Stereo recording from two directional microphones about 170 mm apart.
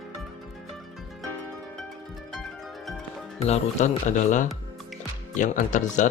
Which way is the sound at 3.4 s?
40° left (ahead or behind).